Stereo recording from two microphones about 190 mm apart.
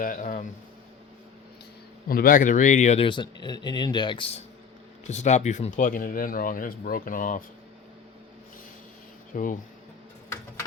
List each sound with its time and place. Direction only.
0.0 s speech: 45° left (ahead or behind)
2.0 s speech: 50° left (ahead or behind)
9.3 s speech: 45° left (ahead or behind)